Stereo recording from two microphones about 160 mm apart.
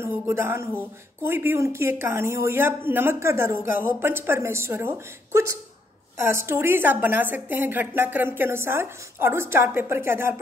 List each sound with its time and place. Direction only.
0.0 s a woman's voice: 15° right (ahead or behind)